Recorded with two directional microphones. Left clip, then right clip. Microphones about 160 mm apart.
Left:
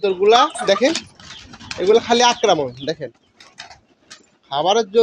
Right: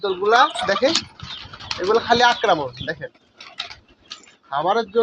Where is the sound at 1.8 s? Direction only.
80° left.